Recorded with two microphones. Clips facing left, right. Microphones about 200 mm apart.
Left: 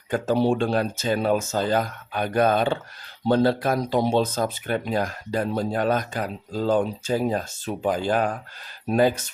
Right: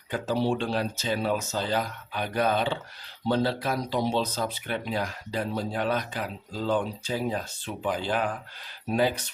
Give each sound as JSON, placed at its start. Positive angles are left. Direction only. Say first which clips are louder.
{"t": 0.1, "sound": "speech", "louder": "left 5 dB", "side_deg": 50}